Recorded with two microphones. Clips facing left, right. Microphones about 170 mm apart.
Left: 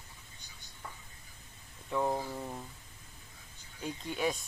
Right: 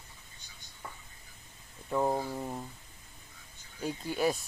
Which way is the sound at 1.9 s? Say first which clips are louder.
Right 3 dB; 15° right (ahead or behind).